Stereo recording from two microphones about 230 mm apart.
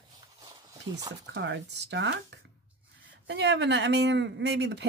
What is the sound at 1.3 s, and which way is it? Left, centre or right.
Speech, right.